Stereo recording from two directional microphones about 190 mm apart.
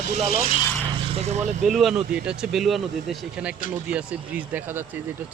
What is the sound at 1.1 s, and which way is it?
Speech, 35° right (ahead or behind).